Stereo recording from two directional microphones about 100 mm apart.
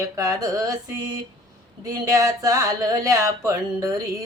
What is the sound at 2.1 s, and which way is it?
Speech, 35° right (ahead or behind).